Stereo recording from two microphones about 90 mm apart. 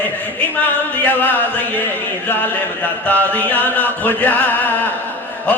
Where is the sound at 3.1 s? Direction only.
20° left (ahead or behind).